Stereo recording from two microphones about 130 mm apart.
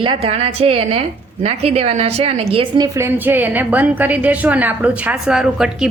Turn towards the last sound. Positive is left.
turn(degrees=-5)  # may be behind; listen again after turning